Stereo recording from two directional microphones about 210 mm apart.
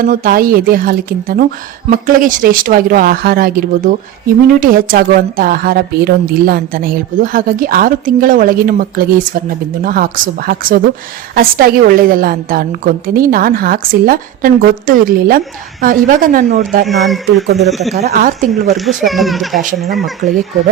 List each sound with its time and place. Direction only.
0.0 s a woman's voice: 45° right (ahead or behind)
16.8 s speech: centre (ahead or behind)
17.4 s a woman's voice: 50° right (ahead or behind)
17.7 s speech: centre (ahead or behind)
17.9 s a woman's voice: 45° right (ahead or behind)
19.0 s speech: centre (ahead or behind)